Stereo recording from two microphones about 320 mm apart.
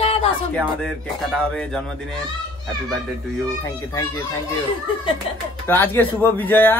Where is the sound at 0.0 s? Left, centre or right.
Centre.